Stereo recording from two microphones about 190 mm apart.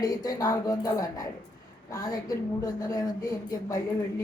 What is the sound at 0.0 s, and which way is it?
A woman's voice, 20° left (ahead or behind).